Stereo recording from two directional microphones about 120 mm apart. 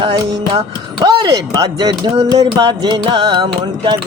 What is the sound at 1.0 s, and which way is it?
Music, 35° right (ahead or behind).